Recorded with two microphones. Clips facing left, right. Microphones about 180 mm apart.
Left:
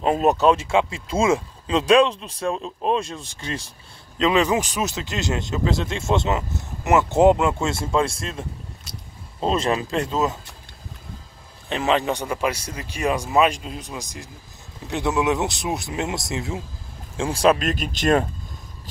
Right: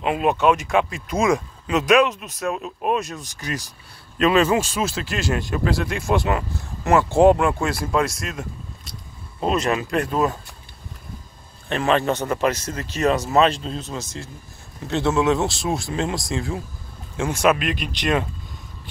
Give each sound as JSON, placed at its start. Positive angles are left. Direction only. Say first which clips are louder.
{"t": 0.0, "sound": "speech", "louder": "left 1 dB", "side_deg": 40}
{"t": 2.5, "sound": "speech", "louder": "even", "side_deg": -10}
{"t": 2.9, "sound": "speech", "louder": "even", "side_deg": 25}
{"t": 4.2, "sound": "speech", "louder": "right 2 dB", "side_deg": 15}
{"t": 9.5, "sound": "speech", "louder": "right 1 dB", "side_deg": 30}
{"t": 11.7, "sound": "speech", "louder": "right 1 dB", "side_deg": 15}